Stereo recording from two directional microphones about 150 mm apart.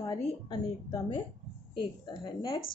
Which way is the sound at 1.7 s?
30° left (ahead or behind).